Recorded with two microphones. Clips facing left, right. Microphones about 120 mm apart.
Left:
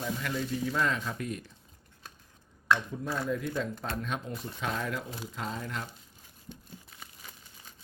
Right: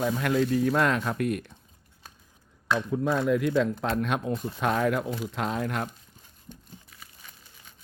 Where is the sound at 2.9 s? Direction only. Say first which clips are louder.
Right 8 dB; 80° right; by 5.9 s 60° right (ahead or behind).